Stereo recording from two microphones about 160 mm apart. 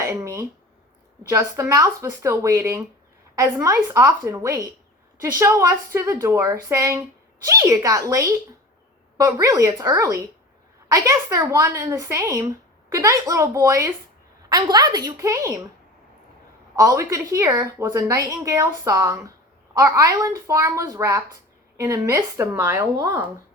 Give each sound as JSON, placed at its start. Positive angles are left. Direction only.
{"t": 0.0, "sound": "a sound", "side_deg": -15}
{"t": 1.3, "sound": "a woman's voice", "side_deg": -20}
{"t": 16.7, "sound": "a woman's voice", "side_deg": -20}